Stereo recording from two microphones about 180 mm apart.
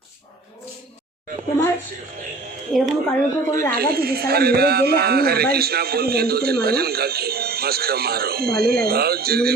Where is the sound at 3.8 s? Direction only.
60° right (ahead or behind).